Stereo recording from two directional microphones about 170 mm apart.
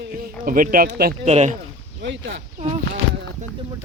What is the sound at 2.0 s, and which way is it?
Speech, 90° right.